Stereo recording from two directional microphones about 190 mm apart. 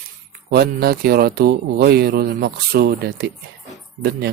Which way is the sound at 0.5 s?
55° right (ahead or behind).